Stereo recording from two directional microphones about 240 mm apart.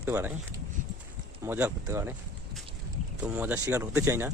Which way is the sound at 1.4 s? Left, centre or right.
Centre.